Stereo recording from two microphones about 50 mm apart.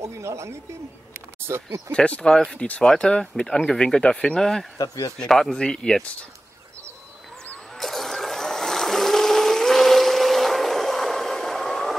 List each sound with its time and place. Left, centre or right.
0.0 s speech: right
1.9 s speech: left
4.4 s speech: centre
7.7 s a sound: centre